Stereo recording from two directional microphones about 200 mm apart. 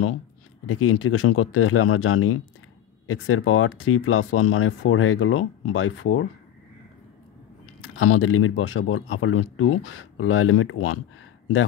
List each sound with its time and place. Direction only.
0.7 s speech: 90° left
7.8 s speech: 90° left